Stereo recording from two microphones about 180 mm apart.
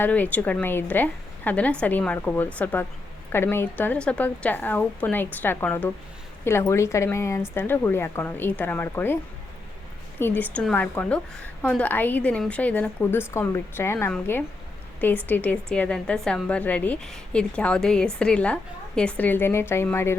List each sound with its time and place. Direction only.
0.0 s a woman's voice: 10° left (ahead or behind)
10.2 s a woman's voice: 10° left (ahead or behind)